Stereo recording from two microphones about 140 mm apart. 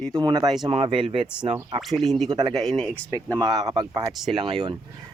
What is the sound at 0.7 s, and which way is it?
Speech, 45° right (ahead or behind).